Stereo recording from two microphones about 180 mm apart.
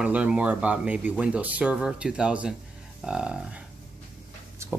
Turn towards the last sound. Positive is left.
turn(degrees=-15)  # may be behind; listen again after turning